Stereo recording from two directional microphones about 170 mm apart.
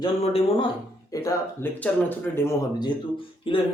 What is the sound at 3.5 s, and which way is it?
Speech, 30° left (ahead or behind).